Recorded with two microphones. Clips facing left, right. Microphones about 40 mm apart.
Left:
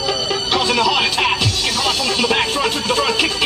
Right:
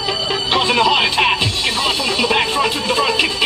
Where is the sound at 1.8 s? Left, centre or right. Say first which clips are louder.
Even; right.